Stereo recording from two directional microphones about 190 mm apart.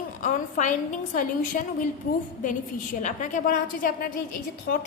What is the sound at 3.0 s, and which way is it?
A woman's voice, 40° left (ahead or behind).